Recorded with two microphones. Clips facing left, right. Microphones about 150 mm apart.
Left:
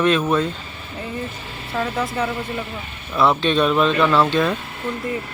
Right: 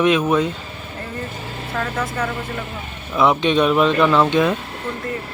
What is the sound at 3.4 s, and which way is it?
Speech, 15° right (ahead or behind).